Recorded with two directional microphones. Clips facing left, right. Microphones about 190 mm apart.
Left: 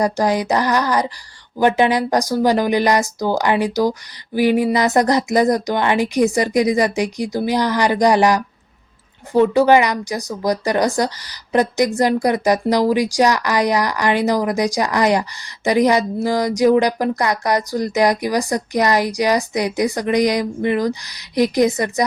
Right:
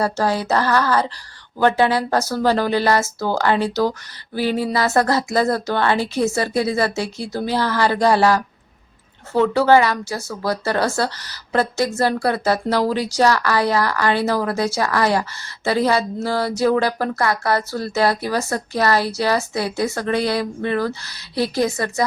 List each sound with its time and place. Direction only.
0.0 s speech: 15° left (ahead or behind)